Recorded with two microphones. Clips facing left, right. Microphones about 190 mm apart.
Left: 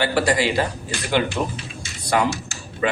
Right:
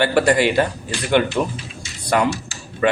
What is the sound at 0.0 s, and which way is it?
Speech, 55° right (ahead or behind).